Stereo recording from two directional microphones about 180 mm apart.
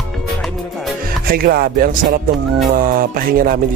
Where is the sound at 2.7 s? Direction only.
50° right (ahead or behind).